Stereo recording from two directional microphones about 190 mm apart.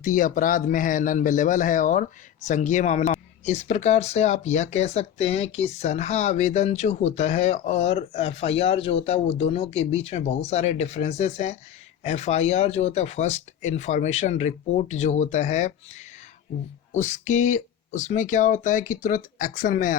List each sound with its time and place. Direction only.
0.0 s speech: 45° left (ahead or behind)